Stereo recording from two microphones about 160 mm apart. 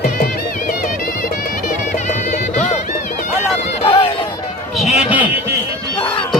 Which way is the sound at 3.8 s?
35° left (ahead or behind).